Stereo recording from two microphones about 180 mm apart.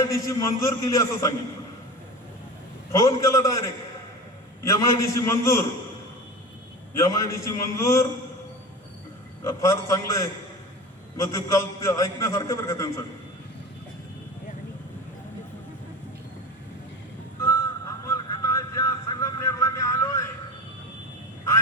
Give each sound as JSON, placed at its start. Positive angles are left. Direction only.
{"t": 0.0, "sound": "a man's voice", "side_deg": 15}
{"t": 2.9, "sound": "a man's voice", "side_deg": 20}
{"t": 4.6, "sound": "a man's voice", "side_deg": 20}
{"t": 6.9, "sound": "a man's voice", "side_deg": 15}
{"t": 9.4, "sound": "a man's voice", "side_deg": 15}
{"t": 18.0, "sound": "a sound", "side_deg": 15}